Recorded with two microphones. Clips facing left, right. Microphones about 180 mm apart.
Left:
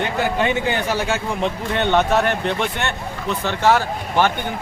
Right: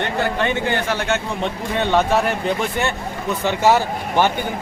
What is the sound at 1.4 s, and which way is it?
Speech, centre (ahead or behind).